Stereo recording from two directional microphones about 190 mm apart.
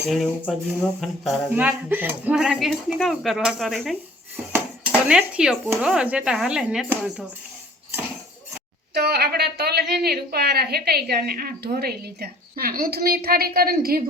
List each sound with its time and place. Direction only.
0.1 s speech: 5° left (ahead or behind)
1.5 s speech: 10° right (ahead or behind)
9.0 s a woman's voice: 60° right (ahead or behind)